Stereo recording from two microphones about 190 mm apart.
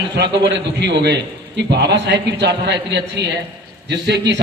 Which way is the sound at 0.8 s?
65° right (ahead or behind).